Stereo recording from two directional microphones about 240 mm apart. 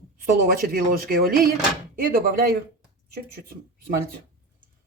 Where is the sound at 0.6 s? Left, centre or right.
Right.